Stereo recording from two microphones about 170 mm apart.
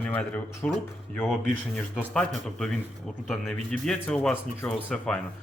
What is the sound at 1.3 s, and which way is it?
Speech, centre (ahead or behind).